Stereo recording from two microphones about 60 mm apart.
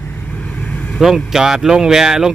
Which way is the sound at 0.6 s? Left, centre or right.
Centre.